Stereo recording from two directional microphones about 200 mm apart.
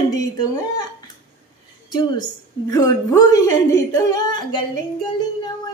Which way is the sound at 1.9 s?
20° left (ahead or behind).